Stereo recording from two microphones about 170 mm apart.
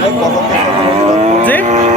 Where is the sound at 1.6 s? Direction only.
45° right (ahead or behind).